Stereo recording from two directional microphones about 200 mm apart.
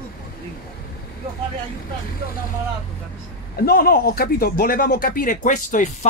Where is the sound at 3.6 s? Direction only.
50° left (ahead or behind).